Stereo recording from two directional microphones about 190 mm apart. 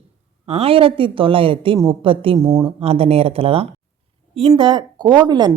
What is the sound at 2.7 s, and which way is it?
A woman's voice, 30° right (ahead or behind).